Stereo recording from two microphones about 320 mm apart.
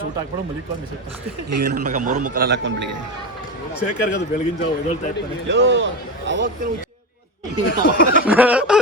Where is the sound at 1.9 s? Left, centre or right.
Right.